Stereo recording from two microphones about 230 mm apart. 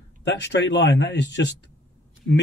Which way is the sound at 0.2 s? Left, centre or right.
Left.